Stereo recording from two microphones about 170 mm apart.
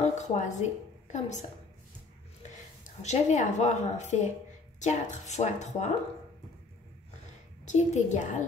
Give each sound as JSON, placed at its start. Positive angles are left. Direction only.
{"t": 0.0, "sound": "a woman's voice", "side_deg": 45}
{"t": 2.8, "sound": "speech", "side_deg": 40}
{"t": 7.6, "sound": "speech", "side_deg": 45}